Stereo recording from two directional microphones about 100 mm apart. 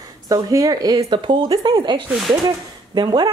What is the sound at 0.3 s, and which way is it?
A woman's voice, 35° right (ahead or behind).